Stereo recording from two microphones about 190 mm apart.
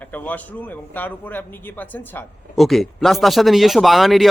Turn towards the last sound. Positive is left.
turn(degrees=0)  # may be behind; listen again after turning